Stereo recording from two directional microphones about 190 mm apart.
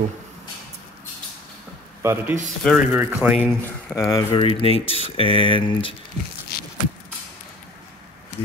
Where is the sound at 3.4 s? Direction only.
10° left (ahead or behind).